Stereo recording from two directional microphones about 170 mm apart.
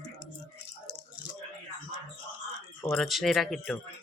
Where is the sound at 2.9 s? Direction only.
Centre (ahead or behind).